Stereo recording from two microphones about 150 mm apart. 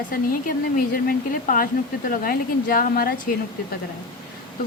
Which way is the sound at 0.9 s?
70° left (ahead or behind).